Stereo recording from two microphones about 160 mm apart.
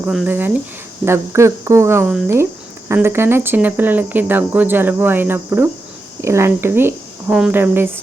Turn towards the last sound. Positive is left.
turn(degrees=-15)  # may be behind; listen again after turning